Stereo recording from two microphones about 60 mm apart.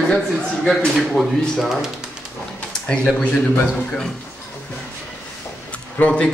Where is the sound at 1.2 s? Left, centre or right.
Centre.